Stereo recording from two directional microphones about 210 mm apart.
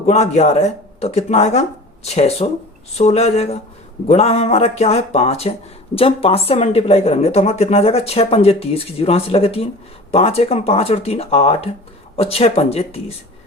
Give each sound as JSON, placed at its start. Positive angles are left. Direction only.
{"t": 0.0, "sound": "speech", "side_deg": 30}